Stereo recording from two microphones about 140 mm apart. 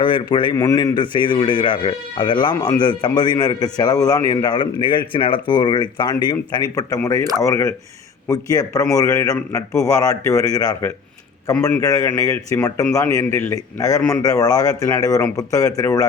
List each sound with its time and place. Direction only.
0.0 s speech: 35° left (ahead or behind)
0.5 s speech: 15° left (ahead or behind)
0.8 s speech: 30° left (ahead or behind)